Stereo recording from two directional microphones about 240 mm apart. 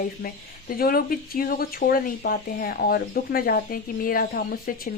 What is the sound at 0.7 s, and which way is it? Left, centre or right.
Speech, left.